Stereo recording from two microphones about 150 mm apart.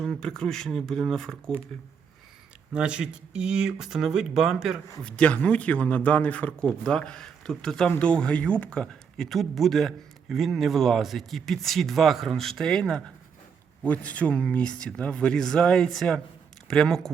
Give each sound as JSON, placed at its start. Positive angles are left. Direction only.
{"t": 0.0, "sound": "speech", "side_deg": 5}
{"t": 2.7, "sound": "speech", "side_deg": -5}